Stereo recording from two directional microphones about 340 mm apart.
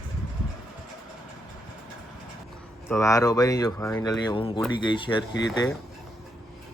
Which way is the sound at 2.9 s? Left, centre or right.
Centre.